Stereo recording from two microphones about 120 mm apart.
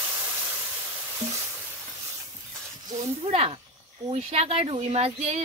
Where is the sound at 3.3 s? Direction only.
55° right (ahead or behind).